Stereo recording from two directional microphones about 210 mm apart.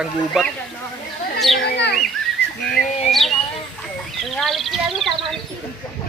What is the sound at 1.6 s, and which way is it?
Speech, 50° left (ahead or behind).